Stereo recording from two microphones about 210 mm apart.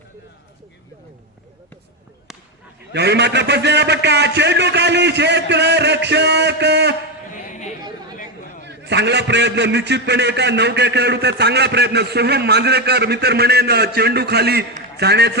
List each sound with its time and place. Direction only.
2.9 s a man's voice: 55° right (ahead or behind)
7.3 s a sound: 35° left (ahead or behind)
7.8 s chatter: 20° right (ahead or behind)
8.6 s a man's voice: 55° right (ahead or behind)